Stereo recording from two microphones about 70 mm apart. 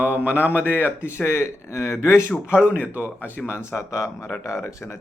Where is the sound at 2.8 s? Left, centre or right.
Right.